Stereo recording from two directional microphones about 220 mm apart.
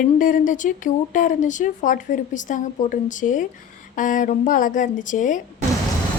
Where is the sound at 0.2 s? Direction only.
35° left (ahead or behind).